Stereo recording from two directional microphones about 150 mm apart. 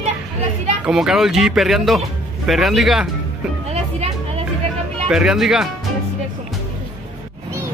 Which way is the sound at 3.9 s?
40° right (ahead or behind).